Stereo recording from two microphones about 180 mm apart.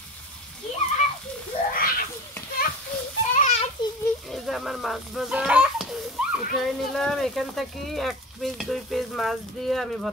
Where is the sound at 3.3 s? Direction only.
40° left (ahead or behind).